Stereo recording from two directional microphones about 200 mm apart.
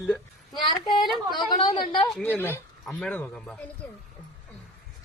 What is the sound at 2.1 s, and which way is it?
Speech, 10° left (ahead or behind).